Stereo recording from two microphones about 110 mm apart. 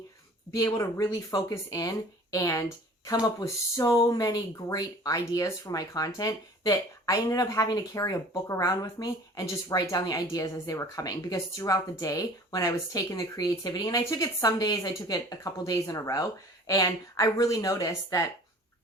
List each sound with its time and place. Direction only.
0.5 s speech: 30° left (ahead or behind)